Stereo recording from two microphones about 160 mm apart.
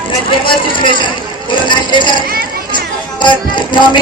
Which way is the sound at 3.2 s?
30° left (ahead or behind).